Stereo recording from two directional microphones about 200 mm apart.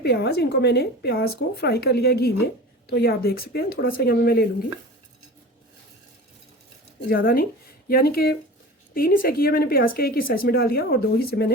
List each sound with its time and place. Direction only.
0.0 s speech: 55° left (ahead or behind)
7.1 s speech: 45° left (ahead or behind)